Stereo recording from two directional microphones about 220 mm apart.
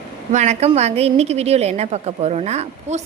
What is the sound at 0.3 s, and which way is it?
A woman's voice, 30° right (ahead or behind).